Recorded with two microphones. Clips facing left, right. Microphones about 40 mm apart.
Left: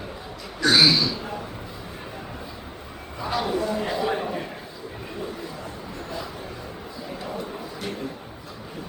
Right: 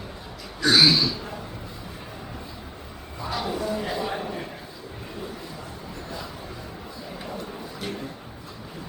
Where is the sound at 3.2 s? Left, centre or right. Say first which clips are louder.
Left 3 dB; centre.